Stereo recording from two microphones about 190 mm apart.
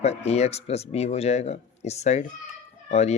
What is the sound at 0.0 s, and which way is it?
Speech, 35° left (ahead or behind).